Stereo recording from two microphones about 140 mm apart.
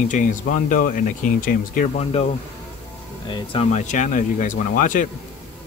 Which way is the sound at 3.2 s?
40° left (ahead or behind).